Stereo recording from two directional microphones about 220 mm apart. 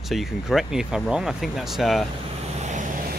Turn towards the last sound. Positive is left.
turn(degrees=-35)  # may be behind; listen again after turning